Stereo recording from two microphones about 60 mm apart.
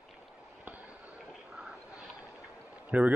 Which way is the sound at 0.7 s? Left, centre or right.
Right.